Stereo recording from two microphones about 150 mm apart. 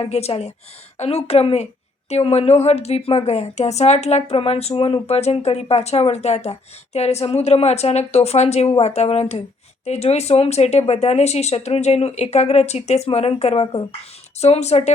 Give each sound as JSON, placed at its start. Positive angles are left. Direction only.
{"t": 0.0, "sound": "speech", "side_deg": 45}